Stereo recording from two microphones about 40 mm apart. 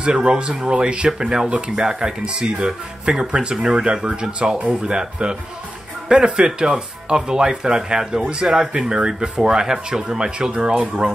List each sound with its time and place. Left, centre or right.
0.1 s speech: centre